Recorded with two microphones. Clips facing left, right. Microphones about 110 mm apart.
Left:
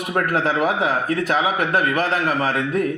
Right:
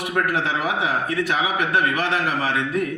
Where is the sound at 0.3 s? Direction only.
45° left (ahead or behind).